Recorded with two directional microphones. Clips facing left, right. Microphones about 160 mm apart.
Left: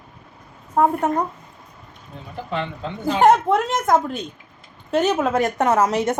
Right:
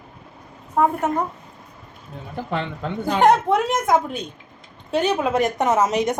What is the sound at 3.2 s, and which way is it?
A woman's voice, centre (ahead or behind).